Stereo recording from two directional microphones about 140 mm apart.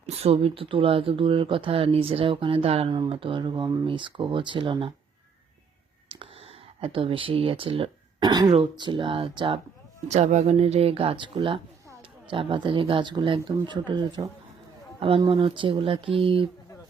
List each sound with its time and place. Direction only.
0.1 s speech: 45° right (ahead or behind)
6.8 s speech: 40° right (ahead or behind)
8.3 s speech: 30° right (ahead or behind)
10.1 s speech: 55° right (ahead or behind)